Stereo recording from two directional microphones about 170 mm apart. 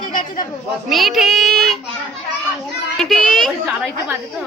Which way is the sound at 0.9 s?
Centre (ahead or behind).